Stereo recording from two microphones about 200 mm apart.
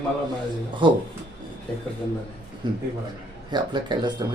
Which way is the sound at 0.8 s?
25° right (ahead or behind).